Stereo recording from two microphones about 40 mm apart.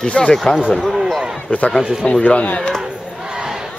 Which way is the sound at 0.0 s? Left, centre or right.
Left.